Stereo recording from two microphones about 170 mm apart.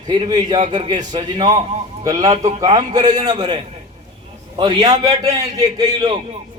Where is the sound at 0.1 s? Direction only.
25° right (ahead or behind).